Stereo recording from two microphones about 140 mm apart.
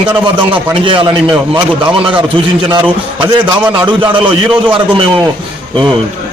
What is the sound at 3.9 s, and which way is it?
Speech, 35° right (ahead or behind).